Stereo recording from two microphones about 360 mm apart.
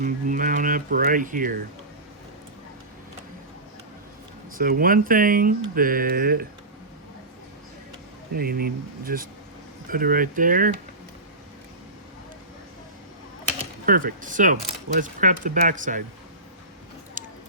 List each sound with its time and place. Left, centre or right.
0.0 s speech: right
4.5 s speech: right
8.4 s speech: right
13.8 s speech: right
17.2 s a sound: right